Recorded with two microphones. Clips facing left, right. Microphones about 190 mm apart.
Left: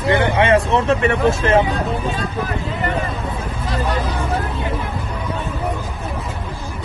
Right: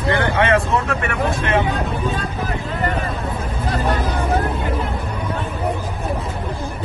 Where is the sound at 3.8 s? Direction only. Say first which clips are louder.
Right 1 dB; 55° right (ahead or behind).